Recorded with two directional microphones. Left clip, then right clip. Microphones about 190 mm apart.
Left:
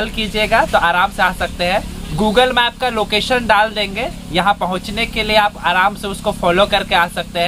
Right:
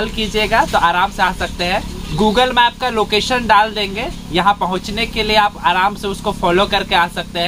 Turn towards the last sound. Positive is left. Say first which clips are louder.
# even
turn(degrees=-5)  # may be behind; listen again after turning